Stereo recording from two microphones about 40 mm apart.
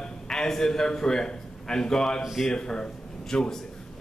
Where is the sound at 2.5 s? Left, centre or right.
Left.